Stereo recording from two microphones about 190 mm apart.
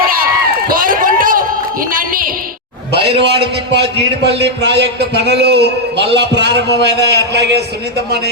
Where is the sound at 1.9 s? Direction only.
50° right (ahead or behind).